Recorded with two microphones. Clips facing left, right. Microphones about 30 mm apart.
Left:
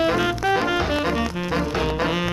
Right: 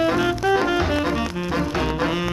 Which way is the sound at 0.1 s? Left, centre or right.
Centre.